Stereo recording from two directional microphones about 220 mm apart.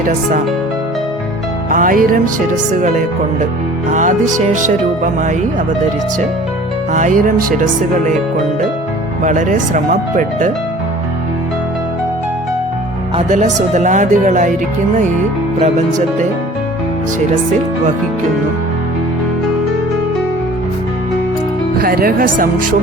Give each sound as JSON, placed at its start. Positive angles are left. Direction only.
{"t": 1.7, "sound": "speech", "side_deg": -40}
{"t": 3.9, "sound": "speech", "side_deg": -35}
{"t": 6.9, "sound": "speech", "side_deg": -35}
{"t": 9.2, "sound": "speech", "side_deg": -35}
{"t": 13.1, "sound": "speech", "side_deg": -30}
{"t": 15.6, "sound": "speech", "side_deg": -35}
{"t": 21.8, "sound": "speech", "side_deg": -40}